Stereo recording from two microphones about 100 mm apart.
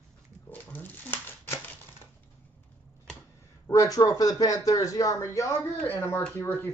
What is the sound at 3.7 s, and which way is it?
A woman's voice, 35° left (ahead or behind).